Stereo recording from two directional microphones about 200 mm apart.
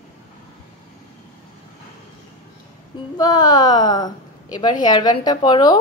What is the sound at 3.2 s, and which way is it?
A woman's voice, 20° left (ahead or behind).